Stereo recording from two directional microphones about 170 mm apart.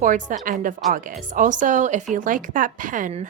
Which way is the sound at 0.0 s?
50° right (ahead or behind).